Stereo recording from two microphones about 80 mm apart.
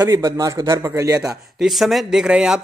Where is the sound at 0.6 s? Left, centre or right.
Right.